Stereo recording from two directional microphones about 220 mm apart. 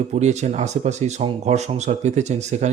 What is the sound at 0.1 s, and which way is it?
Speech, 30° right (ahead or behind).